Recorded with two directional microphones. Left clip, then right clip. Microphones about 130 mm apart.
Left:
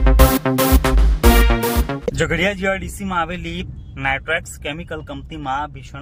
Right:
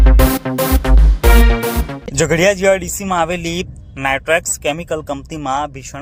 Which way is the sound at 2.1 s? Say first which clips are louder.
Right 8 dB; 30° right (ahead or behind).